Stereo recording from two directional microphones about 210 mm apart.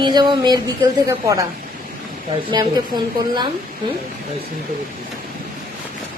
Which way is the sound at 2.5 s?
20° right (ahead or behind).